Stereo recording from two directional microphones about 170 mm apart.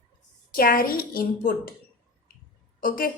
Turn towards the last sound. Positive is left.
turn(degrees=55)  # may be behind; listen again after turning